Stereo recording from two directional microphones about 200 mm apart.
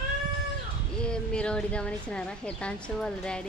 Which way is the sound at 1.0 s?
5° left (ahead or behind).